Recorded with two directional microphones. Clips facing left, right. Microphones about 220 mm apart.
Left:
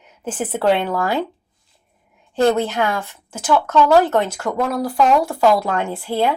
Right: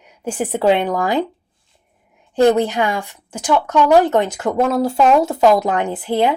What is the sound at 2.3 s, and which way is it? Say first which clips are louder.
Speech: right 3 dB; 15° right (ahead or behind).